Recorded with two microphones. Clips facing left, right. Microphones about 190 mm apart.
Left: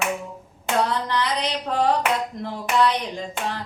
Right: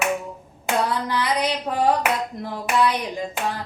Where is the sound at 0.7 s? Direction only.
10° right (ahead or behind).